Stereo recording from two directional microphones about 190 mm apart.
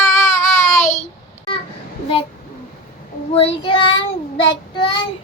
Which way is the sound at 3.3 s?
25° left (ahead or behind).